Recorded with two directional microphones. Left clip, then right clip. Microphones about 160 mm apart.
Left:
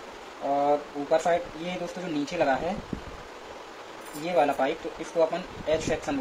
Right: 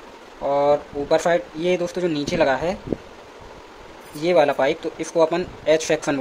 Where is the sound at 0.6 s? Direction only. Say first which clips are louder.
Right 7 dB; 90° right.